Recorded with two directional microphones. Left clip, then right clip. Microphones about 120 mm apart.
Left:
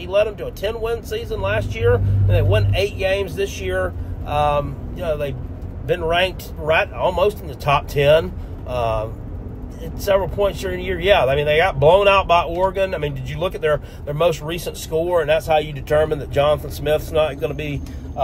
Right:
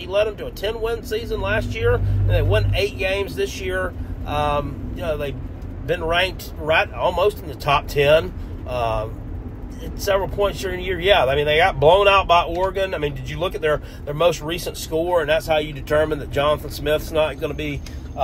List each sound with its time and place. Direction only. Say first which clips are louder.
0.0 s speech: left 2 dB; 25° left (ahead or behind)